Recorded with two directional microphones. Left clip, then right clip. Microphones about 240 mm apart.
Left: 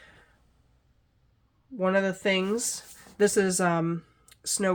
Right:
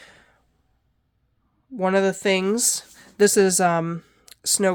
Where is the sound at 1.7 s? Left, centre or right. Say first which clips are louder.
Right 5 dB; right.